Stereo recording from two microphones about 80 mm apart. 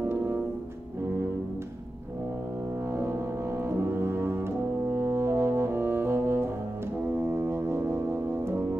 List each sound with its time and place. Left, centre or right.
2.9 s brass instrument: right
7.2 s music: right